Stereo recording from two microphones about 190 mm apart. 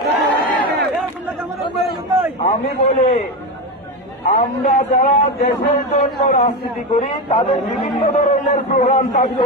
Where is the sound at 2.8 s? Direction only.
35° left (ahead or behind).